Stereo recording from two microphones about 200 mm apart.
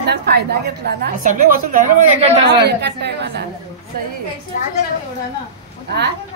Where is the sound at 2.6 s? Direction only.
60° right (ahead or behind).